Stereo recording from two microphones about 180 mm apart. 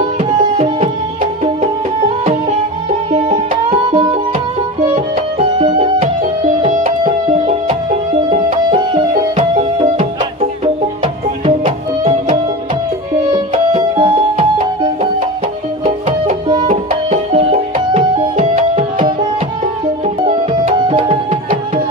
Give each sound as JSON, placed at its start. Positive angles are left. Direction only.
{"t": 0.2, "sound": "music", "side_deg": -35}
{"t": 5.4, "sound": "music", "side_deg": -30}
{"t": 6.6, "sound": "music", "side_deg": -40}
{"t": 8.6, "sound": "music", "side_deg": -25}
{"t": 11.4, "sound": "music", "side_deg": -30}
{"t": 15.8, "sound": "music", "side_deg": -40}
{"t": 20.9, "sound": "music", "side_deg": -30}